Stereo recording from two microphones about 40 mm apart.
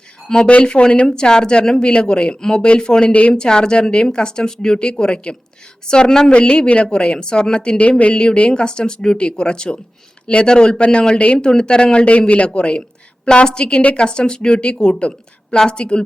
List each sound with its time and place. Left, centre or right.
0.3 s a woman's voice: centre
3.1 s speech: left
3.3 s a woman's voice: left
7.9 s speech: left
8.1 s a woman's voice: left